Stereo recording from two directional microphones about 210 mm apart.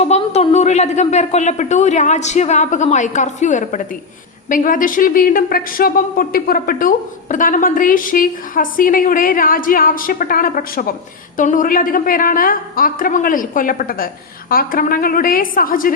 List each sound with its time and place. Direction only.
0.0 s a woman's voice: 30° left (ahead or behind)